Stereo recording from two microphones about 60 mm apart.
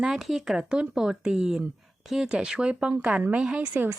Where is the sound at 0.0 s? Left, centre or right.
Centre.